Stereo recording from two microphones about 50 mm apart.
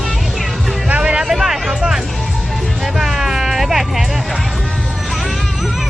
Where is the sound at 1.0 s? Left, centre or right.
Right.